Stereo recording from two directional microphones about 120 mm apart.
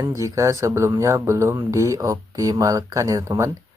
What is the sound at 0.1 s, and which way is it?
Speech, 25° right (ahead or behind).